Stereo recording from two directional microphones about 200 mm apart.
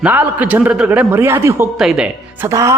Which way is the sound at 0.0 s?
10° right (ahead or behind).